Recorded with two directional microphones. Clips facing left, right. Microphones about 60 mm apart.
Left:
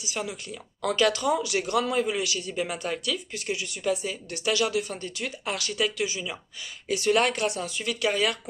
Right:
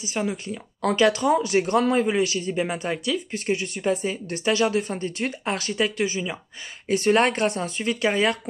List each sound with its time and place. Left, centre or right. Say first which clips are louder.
0.0 s a man's voice: right 6 dB; right
3.3 s speech: right 6 dB; right